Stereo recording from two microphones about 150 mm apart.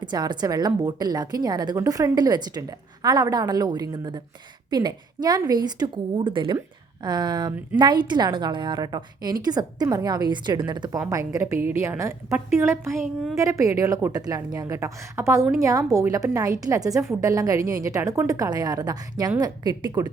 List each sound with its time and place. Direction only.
0.0 s a woman's voice: 30° right (ahead or behind)